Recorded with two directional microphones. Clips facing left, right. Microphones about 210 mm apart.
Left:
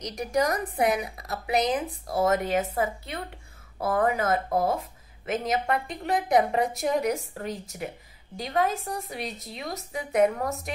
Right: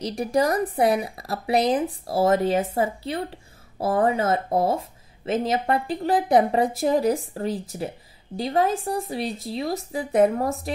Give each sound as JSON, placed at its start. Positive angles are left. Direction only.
{"t": 0.0, "sound": "speech", "side_deg": -30}